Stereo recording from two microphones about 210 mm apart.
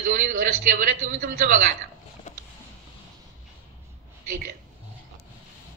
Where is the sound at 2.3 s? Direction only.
35° left (ahead or behind).